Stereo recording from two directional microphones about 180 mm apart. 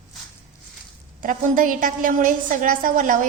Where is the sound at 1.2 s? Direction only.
50° right (ahead or behind).